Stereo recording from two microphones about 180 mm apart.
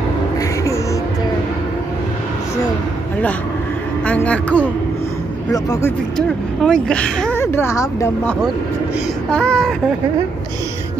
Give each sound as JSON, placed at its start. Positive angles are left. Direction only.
{"t": 4.0, "sound": "speech", "side_deg": 5}
{"t": 6.1, "sound": "speech", "side_deg": 5}
{"t": 9.3, "sound": "speech", "side_deg": 5}